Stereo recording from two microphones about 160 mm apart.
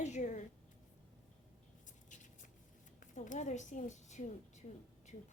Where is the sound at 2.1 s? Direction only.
50° left (ahead or behind).